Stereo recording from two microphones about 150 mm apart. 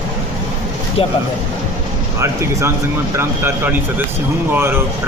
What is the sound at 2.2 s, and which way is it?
Speech, 20° right (ahead or behind).